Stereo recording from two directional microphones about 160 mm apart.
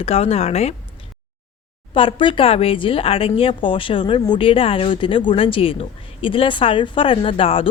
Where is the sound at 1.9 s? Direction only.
30° left (ahead or behind).